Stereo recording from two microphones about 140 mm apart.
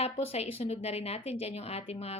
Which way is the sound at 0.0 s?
45° left (ahead or behind).